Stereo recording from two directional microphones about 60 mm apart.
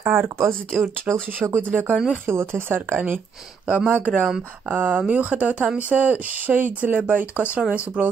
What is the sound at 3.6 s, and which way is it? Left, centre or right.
Speech, right.